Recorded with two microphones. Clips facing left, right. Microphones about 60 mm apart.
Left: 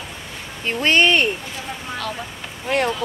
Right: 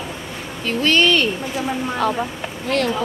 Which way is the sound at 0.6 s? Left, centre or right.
Left.